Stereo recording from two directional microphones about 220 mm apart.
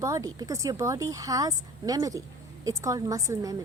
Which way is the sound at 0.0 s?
15° right (ahead or behind).